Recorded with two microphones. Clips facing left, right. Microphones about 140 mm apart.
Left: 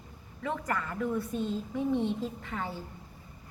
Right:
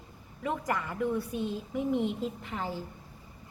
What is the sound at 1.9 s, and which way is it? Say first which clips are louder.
Speech: even; 30° left (ahead or behind).